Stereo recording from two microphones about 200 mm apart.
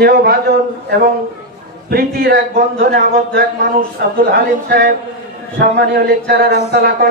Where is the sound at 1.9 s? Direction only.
50° right (ahead or behind).